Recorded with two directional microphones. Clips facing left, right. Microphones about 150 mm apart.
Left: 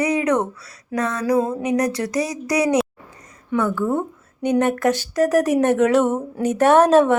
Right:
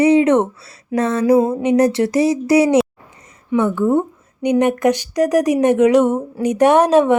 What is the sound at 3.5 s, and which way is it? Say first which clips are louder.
Speech: right 5 dB; 20° right (ahead or behind).